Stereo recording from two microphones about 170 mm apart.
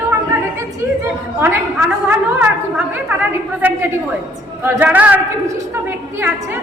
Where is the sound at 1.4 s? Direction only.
10° right (ahead or behind).